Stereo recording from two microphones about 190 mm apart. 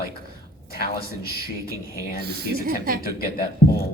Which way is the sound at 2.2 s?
55° right (ahead or behind).